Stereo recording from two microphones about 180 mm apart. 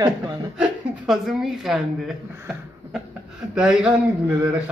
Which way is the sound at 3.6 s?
5° right (ahead or behind).